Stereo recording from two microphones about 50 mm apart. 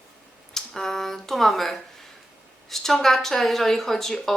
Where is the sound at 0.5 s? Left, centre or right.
Centre.